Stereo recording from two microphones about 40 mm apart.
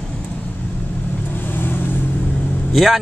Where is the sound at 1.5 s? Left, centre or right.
Left.